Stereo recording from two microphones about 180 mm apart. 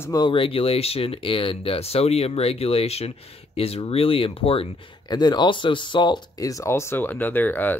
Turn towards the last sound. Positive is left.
turn(degrees=10)  # may be behind; listen again after turning